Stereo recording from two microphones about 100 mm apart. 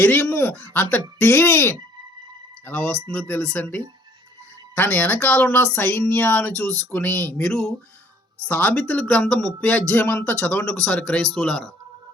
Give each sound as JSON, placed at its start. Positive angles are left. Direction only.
{"t": 0.0, "sound": "speech", "side_deg": 20}
{"t": 7.4, "sound": "speech", "side_deg": 5}
{"t": 8.4, "sound": "a man's voice", "side_deg": 15}